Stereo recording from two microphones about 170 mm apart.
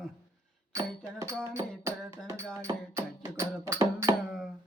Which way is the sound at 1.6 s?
15° right (ahead or behind).